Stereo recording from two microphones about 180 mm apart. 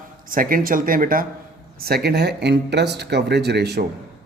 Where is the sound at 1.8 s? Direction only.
60° right (ahead or behind).